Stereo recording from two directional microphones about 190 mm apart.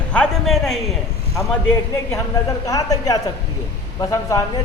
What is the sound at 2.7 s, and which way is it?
Speech, 20° left (ahead or behind).